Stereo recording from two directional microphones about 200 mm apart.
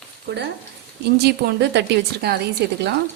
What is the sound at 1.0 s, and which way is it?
A woman's voice, 50° right (ahead or behind).